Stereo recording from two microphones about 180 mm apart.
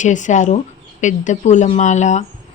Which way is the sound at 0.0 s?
45° left (ahead or behind).